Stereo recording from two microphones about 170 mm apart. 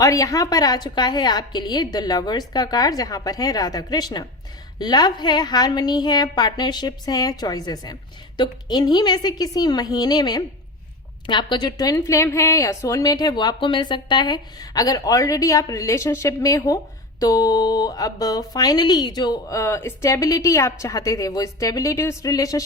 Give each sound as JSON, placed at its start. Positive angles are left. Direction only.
{"t": 0.0, "sound": "a woman's voice", "side_deg": 20}